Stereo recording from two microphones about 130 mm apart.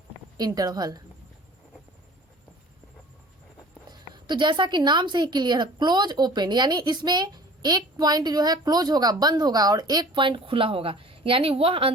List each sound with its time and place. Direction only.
0.3 s a woman's voice: 30° right (ahead or behind)
4.1 s a woman's voice: 35° right (ahead or behind)